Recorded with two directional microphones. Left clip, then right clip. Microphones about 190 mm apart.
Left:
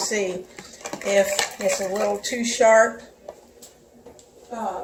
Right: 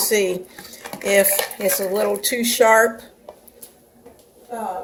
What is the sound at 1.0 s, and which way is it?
Cutlery, 60° right (ahead or behind).